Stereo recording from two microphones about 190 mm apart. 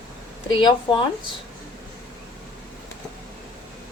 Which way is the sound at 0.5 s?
25° left (ahead or behind).